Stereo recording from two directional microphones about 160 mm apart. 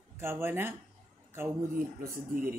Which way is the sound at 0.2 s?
15° right (ahead or behind).